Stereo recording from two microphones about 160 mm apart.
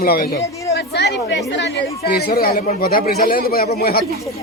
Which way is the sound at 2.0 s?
75° left (ahead or behind).